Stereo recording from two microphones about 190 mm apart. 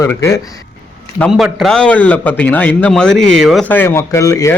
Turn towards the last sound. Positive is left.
turn(degrees=15)  # may be behind; listen again after turning